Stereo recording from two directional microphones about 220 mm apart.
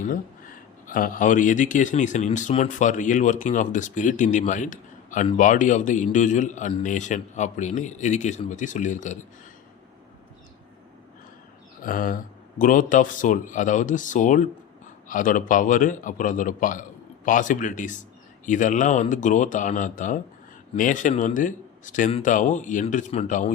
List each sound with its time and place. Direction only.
0.0 s speech: 40° left (ahead or behind)
11.8 s speech: 40° left (ahead or behind)